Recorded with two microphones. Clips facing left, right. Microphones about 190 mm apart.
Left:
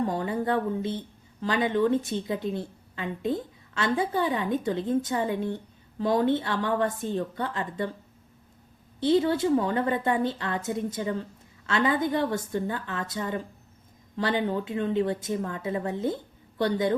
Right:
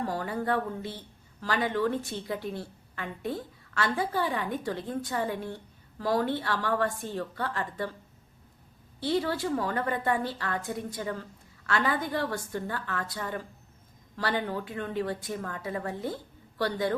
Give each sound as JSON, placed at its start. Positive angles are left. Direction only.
{"t": 0.0, "sound": "speech", "side_deg": 20}
{"t": 9.0, "sound": "speech", "side_deg": 20}